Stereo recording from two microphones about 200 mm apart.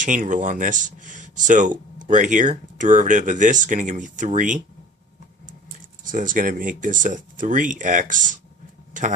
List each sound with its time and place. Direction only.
0.0 s speech: 40° right (ahead or behind)
6.1 s speech: 40° right (ahead or behind)